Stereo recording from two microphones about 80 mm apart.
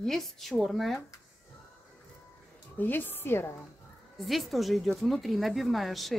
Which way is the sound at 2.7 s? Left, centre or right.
Left.